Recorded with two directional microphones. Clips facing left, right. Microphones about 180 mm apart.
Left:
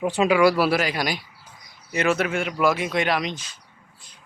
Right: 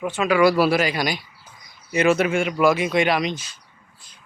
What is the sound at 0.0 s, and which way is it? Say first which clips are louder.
Speech: left 3 dB; 35° left (ahead or behind).